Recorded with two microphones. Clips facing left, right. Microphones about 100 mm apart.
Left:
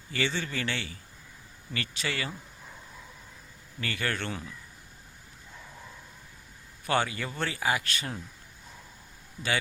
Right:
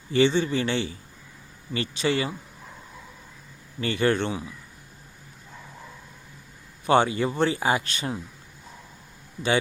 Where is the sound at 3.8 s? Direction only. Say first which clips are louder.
Right 9 dB; 25° right (ahead or behind).